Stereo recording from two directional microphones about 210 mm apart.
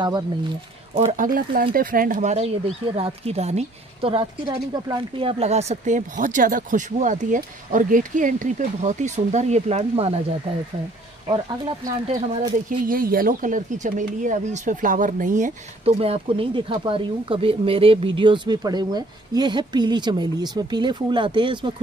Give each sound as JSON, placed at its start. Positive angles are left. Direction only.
{"t": 0.9, "sound": "a woman's voice", "side_deg": -35}
{"t": 12.1, "sound": "speech", "side_deg": -40}